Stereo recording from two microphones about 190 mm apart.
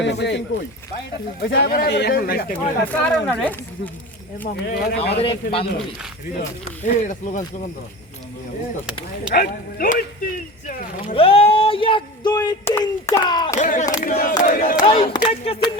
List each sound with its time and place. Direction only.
0.0 s speech: 65° left (ahead or behind)
2.8 s speech: 10° left (ahead or behind)
4.7 s speech: 55° left (ahead or behind)
4.9 s speech: 30° left (ahead or behind)
6.8 s speech: 40° left (ahead or behind)
9.3 s speech: 55° left (ahead or behind)
11.0 s speech: 30° left (ahead or behind)
13.6 s speech: 40° left (ahead or behind)
14.4 s battle cry: 45° left (ahead or behind)
15.0 s speech: 30° left (ahead or behind)